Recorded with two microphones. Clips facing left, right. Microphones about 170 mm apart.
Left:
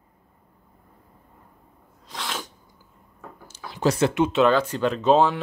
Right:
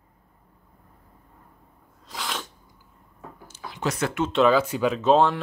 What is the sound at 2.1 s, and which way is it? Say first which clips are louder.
Sneeze: even; centre (ahead or behind).